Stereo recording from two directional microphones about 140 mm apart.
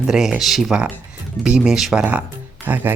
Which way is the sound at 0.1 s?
5° right (ahead or behind).